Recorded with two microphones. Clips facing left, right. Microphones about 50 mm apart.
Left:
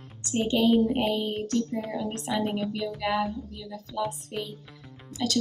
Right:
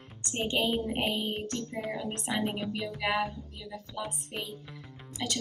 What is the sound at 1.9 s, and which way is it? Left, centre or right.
Speech, right.